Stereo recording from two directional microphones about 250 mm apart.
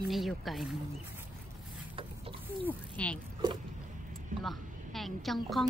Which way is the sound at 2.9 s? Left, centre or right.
Centre.